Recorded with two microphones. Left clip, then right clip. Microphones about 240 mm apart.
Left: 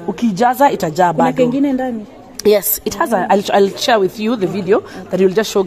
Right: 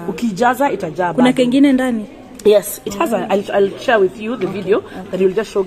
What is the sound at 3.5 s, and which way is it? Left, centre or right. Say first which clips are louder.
Speech: right 1 dB; left.